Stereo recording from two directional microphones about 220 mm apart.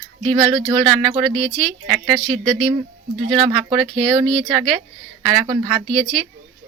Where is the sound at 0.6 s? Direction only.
20° right (ahead or behind).